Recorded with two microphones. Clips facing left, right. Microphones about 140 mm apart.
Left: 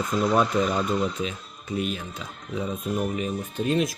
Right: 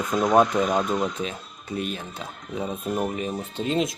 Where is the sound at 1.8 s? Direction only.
40° right (ahead or behind).